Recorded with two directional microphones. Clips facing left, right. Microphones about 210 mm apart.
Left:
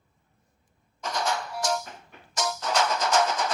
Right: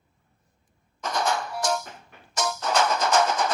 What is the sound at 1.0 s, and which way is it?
Music, 55° right (ahead or behind).